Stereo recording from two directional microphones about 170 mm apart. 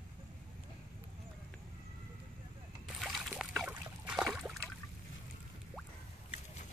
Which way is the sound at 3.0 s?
Centre (ahead or behind).